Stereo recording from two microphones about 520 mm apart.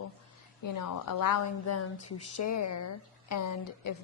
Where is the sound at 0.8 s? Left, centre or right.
Left.